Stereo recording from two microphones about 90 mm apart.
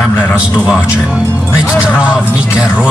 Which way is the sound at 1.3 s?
20° left (ahead or behind).